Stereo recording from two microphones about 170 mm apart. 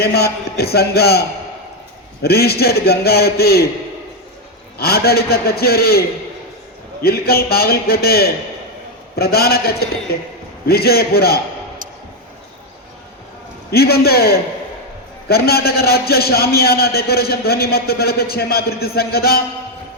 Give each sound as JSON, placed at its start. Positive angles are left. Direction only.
{"t": 0.0, "sound": "a man's voice", "side_deg": 70}
{"t": 2.2, "sound": "a man's voice", "side_deg": 65}
{"t": 4.8, "sound": "a man's voice", "side_deg": 65}
{"t": 13.7, "sound": "a man's voice", "side_deg": 65}